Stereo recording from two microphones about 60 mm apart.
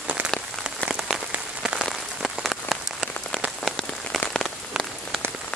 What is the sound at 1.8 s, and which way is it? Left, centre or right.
Rain on surface, centre.